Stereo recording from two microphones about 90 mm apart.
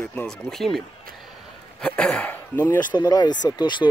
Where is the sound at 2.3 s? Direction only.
20° left (ahead or behind).